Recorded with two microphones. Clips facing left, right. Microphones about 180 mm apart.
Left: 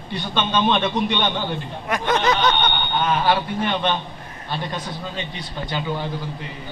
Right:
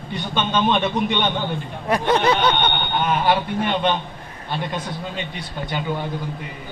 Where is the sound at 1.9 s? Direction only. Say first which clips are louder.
Right 2 dB; 30° right (ahead or behind).